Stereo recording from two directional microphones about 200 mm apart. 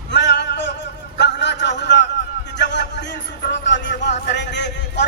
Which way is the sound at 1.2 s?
60° left (ahead or behind).